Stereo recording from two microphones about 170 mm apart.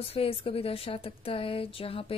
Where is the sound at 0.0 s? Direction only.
35° left (ahead or behind).